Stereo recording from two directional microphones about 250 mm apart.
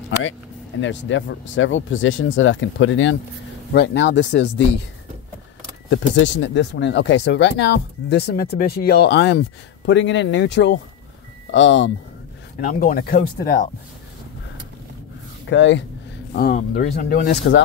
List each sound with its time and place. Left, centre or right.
0.2 s speech: left
5.9 s speech: left
12.5 s speech: left
15.5 s speech: left
16.3 s speech: left